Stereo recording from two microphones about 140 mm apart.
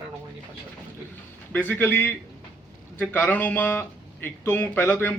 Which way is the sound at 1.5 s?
15° left (ahead or behind).